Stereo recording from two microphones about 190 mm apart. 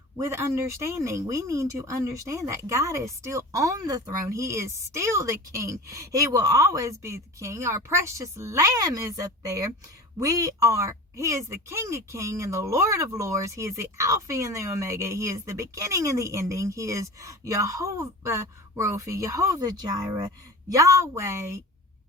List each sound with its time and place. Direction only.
0.2 s speech: 15° right (ahead or behind)